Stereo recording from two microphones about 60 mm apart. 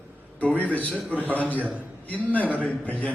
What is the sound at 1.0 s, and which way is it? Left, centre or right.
Speech, right.